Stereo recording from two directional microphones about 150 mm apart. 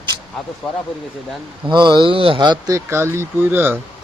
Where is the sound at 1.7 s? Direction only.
30° right (ahead or behind); by 3.7 s 15° right (ahead or behind).